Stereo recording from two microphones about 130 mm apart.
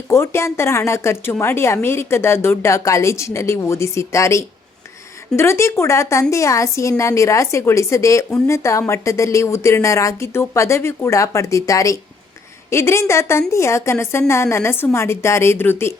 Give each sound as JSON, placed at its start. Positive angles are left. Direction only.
{"t": 0.1, "sound": "a woman's voice", "side_deg": 20}